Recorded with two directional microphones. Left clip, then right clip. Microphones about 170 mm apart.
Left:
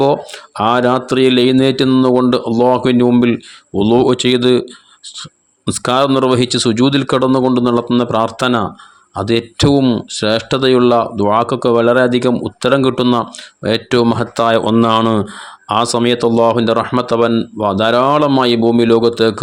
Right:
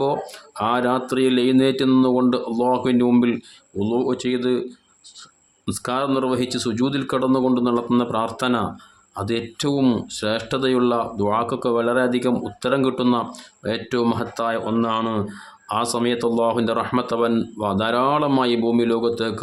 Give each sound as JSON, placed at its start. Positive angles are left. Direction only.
{"t": 0.0, "sound": "speech", "side_deg": 40}
{"t": 5.6, "sound": "speech", "side_deg": 45}